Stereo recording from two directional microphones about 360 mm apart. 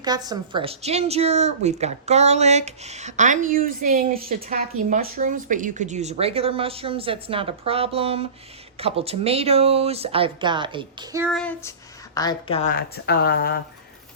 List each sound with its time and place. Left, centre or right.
0.0 s a woman's voice: centre; by 13.6 s left